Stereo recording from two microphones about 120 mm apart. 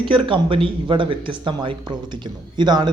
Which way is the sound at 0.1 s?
45° right (ahead or behind).